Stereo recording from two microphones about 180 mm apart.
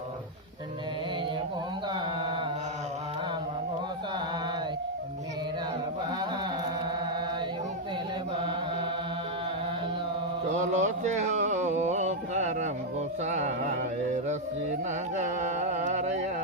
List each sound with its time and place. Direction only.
10.5 s a sound: 40° right (ahead or behind)
13.2 s music: 40° right (ahead or behind)
15.1 s carnatic music: 40° right (ahead or behind)